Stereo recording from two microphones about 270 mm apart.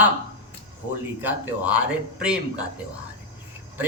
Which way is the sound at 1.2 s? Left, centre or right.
Centre.